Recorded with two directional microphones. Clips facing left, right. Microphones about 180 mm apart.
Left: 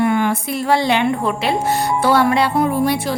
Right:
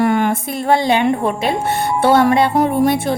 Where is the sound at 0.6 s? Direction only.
20° right (ahead or behind).